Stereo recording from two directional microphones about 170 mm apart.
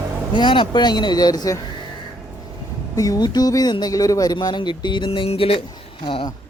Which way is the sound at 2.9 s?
20° left (ahead or behind).